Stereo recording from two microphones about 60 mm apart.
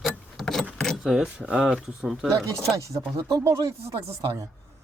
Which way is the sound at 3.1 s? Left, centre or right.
Right.